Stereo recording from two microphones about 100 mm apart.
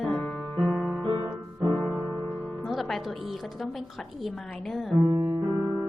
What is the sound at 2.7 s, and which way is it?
Music, centre (ahead or behind).